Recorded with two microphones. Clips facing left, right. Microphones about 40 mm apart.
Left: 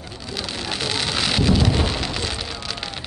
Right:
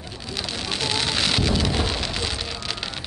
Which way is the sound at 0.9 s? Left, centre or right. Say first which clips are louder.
Left 1 dB; centre.